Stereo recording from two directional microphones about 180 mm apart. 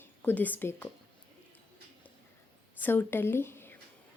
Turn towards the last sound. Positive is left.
turn(degrees=15)  # may be behind; listen again after turning